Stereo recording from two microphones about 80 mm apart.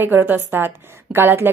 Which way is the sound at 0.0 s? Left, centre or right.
Right.